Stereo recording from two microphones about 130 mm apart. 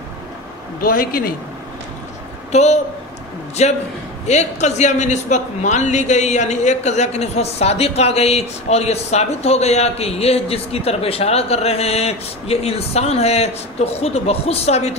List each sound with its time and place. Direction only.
0.7 s speech: 90° left
2.5 s a man's voice: 60° left (ahead or behind)